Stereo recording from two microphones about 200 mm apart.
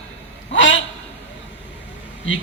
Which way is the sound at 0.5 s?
70° left (ahead or behind).